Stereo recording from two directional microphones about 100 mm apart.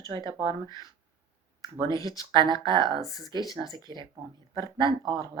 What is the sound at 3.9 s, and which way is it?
Speech, 50° right (ahead or behind).